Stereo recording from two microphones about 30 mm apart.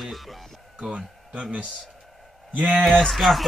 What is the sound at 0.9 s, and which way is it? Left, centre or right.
Speech, right.